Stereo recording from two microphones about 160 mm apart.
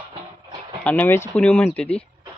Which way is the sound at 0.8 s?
10° left (ahead or behind).